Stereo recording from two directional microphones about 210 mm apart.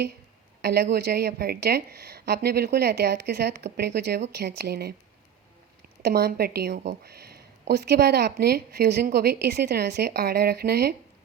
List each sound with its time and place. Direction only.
0.6 s a woman's voice: 50° right (ahead or behind)
6.0 s a woman's voice: 50° right (ahead or behind)